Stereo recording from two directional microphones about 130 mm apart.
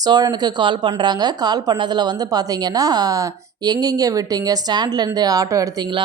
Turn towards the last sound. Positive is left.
turn(degrees=-25)  # may be behind; listen again after turning